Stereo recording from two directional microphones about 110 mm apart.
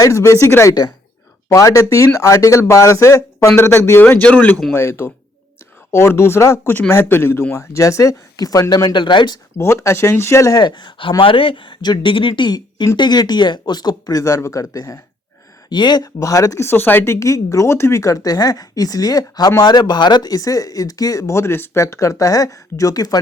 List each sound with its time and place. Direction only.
0.0 s speech: 30° left (ahead or behind)
0.7 s speech: 35° left (ahead or behind)
9.6 s speech: 25° left (ahead or behind)